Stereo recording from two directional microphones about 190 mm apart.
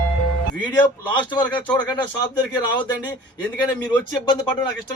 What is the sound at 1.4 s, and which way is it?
Speech, 10° left (ahead or behind).